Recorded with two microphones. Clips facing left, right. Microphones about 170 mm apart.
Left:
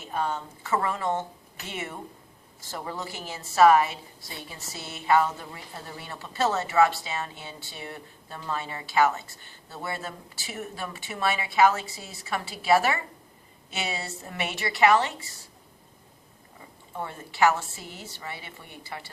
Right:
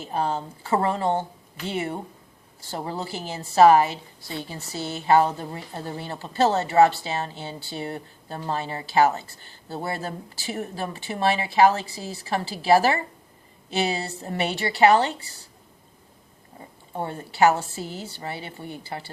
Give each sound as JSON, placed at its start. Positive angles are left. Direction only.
{"t": 0.0, "sound": "speech", "side_deg": -30}
{"t": 16.6, "sound": "speech", "side_deg": -35}